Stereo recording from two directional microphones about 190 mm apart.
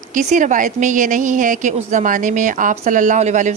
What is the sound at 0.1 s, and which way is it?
A woman's voice, 40° right (ahead or behind).